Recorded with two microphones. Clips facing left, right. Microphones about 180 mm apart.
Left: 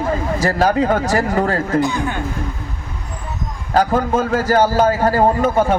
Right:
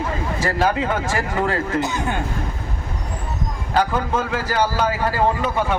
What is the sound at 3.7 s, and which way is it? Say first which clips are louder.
A man's voice: left 5 dB; 40° left (ahead or behind).